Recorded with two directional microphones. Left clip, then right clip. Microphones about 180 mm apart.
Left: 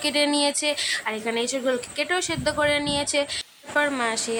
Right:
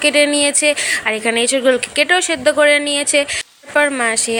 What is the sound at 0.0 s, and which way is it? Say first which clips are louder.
A woman's voice: right 9 dB; 20° right (ahead or behind).